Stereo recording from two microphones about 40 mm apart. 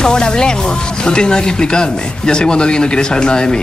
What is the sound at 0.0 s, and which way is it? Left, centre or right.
Speech, centre.